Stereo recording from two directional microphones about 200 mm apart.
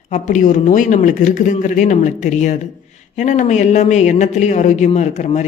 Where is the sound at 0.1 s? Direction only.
40° left (ahead or behind).